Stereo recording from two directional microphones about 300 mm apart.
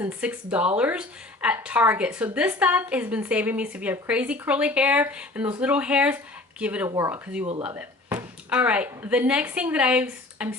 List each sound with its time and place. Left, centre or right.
0.0 s a woman's voice: centre
7.4 s speech: centre
7.8 s speech: centre